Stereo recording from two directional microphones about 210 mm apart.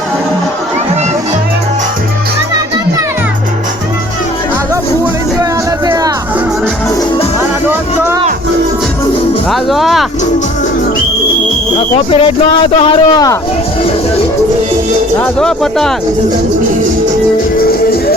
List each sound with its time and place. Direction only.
5.4 s music: 15° right (ahead or behind)
7.7 s music: 10° right (ahead or behind)
9.5 s music: centre (ahead or behind)
12.1 s speech: 25° left (ahead or behind)
15.2 s speech: 5° left (ahead or behind)
17.6 s music: 45° left (ahead or behind)